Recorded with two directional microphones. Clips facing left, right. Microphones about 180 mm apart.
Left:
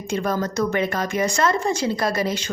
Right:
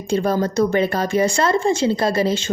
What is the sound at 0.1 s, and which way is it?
A woman's voice, 30° right (ahead or behind).